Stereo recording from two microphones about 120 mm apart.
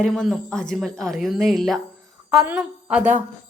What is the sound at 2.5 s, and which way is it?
Speech, 10° right (ahead or behind).